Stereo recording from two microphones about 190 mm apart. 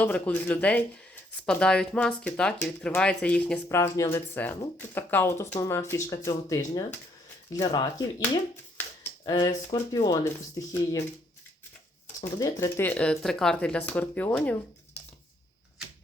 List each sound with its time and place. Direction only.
0.0 s speech: 10° left (ahead or behind)
9.2 s speech: 20° left (ahead or behind)
12.2 s speech: 15° left (ahead or behind)